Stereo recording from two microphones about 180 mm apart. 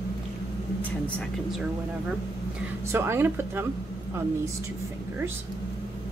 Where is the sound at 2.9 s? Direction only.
10° right (ahead or behind).